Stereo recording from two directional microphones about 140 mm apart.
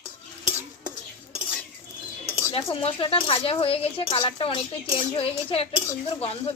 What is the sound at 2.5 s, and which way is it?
Speech, 40° left (ahead or behind).